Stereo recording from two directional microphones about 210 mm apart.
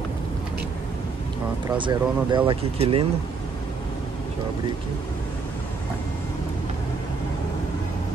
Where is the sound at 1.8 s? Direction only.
20° right (ahead or behind).